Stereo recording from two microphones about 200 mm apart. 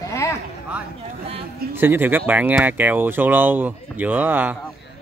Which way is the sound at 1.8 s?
10° right (ahead or behind).